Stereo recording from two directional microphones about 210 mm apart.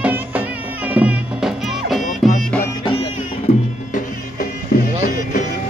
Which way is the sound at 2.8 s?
25° left (ahead or behind).